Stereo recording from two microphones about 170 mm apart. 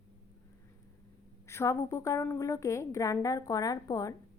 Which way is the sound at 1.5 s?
15° left (ahead or behind).